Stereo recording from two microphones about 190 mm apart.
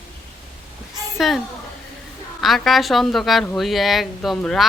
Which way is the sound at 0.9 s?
Centre (ahead or behind).